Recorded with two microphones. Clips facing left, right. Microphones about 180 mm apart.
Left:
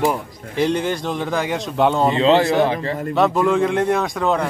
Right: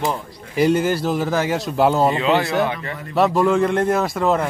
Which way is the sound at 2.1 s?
25° left (ahead or behind).